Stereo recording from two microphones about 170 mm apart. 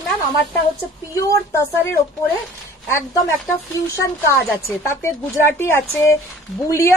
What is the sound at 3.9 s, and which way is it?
Speech, 15° left (ahead or behind).